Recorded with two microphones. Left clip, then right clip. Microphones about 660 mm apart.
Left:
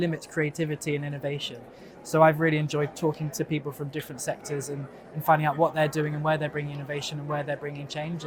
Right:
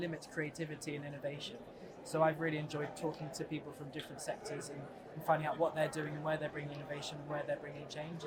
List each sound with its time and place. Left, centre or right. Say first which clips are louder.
0.0 s speech: left 12 dB; left